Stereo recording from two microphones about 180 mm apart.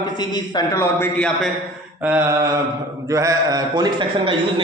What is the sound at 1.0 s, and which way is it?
Speech, 5° left (ahead or behind).